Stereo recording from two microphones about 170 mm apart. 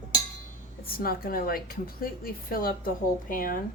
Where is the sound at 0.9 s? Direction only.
60° left (ahead or behind).